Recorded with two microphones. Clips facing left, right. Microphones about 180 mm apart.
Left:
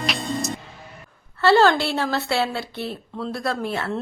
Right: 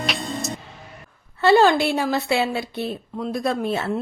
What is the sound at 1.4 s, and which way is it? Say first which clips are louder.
Speech: right 1 dB; 15° right (ahead or behind).